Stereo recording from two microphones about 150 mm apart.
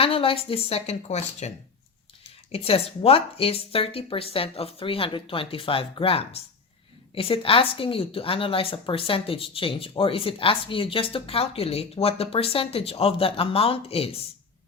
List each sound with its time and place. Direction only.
0.0 s a woman's voice: 40° left (ahead or behind)